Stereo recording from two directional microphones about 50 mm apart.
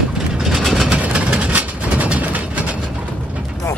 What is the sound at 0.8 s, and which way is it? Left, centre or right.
Vehicle, right.